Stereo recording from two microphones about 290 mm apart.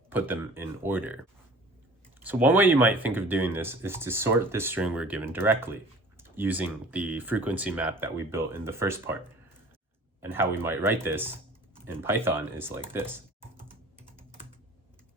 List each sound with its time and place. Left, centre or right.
0.1 s speech: centre
2.2 s speech: centre
10.2 s speech: centre